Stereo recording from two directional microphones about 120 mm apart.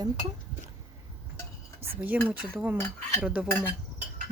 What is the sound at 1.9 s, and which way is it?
Speech, 15° right (ahead or behind).